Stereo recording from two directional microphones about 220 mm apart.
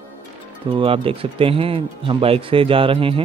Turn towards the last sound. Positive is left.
turn(degrees=-25)  # may be behind; listen again after turning